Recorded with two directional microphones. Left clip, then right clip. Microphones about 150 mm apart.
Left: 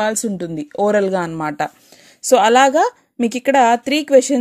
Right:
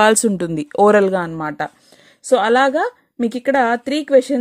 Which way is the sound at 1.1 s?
5° right (ahead or behind).